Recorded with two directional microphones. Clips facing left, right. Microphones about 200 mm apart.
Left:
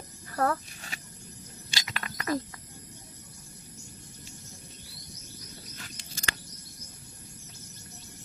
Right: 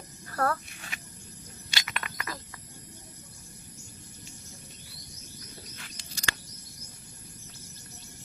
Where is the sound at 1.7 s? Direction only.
35° left (ahead or behind).